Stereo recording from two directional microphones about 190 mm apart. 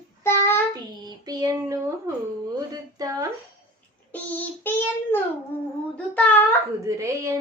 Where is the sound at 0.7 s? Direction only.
20° right (ahead or behind).